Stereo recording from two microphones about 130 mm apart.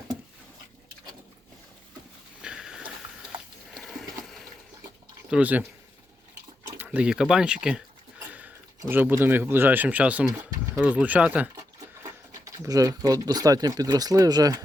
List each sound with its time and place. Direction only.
2.4 s a sound: 5° right (ahead or behind)
5.3 s speech: 10° right (ahead or behind)
6.7 s speech: 10° right (ahead or behind)
8.9 s speech: 15° right (ahead or behind)
12.0 s speech: 25° right (ahead or behind)